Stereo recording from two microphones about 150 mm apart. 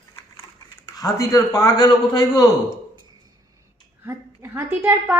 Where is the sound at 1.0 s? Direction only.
25° left (ahead or behind).